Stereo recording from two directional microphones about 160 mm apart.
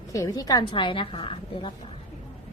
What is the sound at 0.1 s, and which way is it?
A woman's voice, 20° left (ahead or behind).